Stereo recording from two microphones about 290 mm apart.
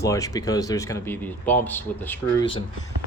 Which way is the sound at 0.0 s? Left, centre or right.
Centre.